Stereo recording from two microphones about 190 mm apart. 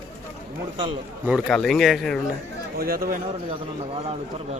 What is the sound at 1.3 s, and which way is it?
Speech, centre (ahead or behind).